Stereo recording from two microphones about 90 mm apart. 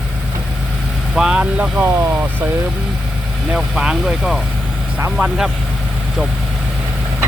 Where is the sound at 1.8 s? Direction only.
30° right (ahead or behind).